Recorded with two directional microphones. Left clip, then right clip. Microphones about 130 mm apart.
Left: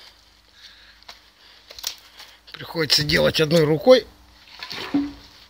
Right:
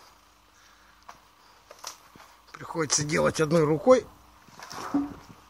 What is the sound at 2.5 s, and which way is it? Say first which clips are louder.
Speech: left 7 dB; 45° left (ahead or behind).